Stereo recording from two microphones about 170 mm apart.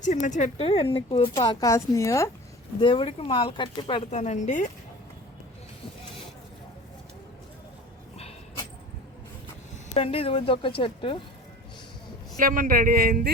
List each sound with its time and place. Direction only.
0.0 s a woman's voice: 45° left (ahead or behind); by 2.3 s 15° left (ahead or behind)
2.8 s a woman's voice: 30° left (ahead or behind)
4.1 s speech: 40° left (ahead or behind)
9.9 s a woman's voice: 35° left (ahead or behind)
12.4 s a man's voice: 55° right (ahead or behind)